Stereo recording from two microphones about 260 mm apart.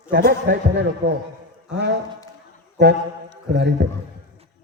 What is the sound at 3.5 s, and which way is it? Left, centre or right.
Speech, right.